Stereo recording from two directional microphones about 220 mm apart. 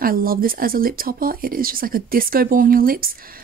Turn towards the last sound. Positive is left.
turn(degrees=-40)  # may be behind; listen again after turning